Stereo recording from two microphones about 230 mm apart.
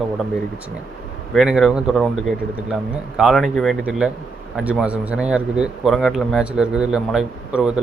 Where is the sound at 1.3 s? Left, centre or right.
Centre.